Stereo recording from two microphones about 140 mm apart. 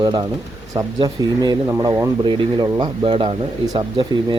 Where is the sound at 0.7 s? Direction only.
25° right (ahead or behind).